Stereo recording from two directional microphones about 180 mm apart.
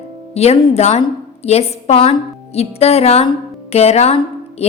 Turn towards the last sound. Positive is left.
turn(degrees=35)  # may be behind; listen again after turning